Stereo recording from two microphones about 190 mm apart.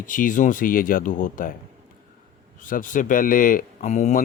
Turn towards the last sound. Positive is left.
turn(degrees=40)  # may be behind; listen again after turning